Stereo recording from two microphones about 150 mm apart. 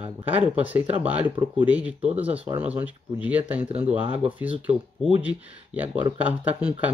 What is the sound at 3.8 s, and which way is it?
Speech, 40° right (ahead or behind).